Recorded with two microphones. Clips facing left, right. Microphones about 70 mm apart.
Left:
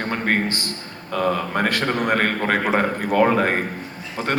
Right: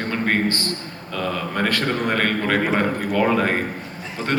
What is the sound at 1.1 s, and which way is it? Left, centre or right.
A man's voice, left.